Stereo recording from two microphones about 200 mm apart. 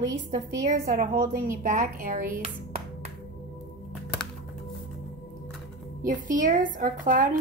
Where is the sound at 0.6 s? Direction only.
40° right (ahead or behind).